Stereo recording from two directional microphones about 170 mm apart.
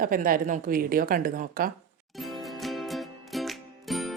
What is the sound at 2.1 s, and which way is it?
Music, centre (ahead or behind).